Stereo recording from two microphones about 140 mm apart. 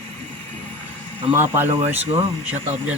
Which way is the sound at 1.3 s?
15° right (ahead or behind).